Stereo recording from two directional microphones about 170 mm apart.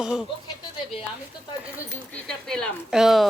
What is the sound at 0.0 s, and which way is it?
Speech, 5° right (ahead or behind).